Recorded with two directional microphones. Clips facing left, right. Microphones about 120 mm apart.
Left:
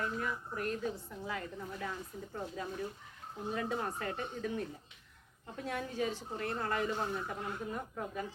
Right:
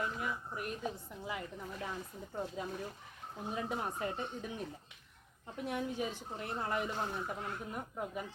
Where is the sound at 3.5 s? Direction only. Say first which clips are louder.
Left 2 dB; 15° right (ahead or behind).